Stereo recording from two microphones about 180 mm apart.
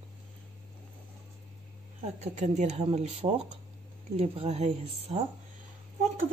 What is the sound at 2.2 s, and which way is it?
A man's voice, 40° right (ahead or behind).